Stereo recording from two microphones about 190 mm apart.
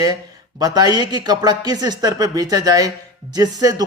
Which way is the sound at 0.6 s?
20° right (ahead or behind).